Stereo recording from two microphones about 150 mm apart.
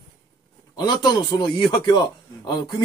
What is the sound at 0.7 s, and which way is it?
Speech, 30° left (ahead or behind).